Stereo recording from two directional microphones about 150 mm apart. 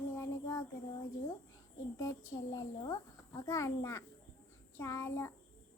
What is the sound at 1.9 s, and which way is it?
A child's voice, 20° left (ahead or behind).